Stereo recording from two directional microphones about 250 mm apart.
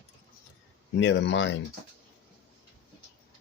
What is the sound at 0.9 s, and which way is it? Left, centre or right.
Speech, left.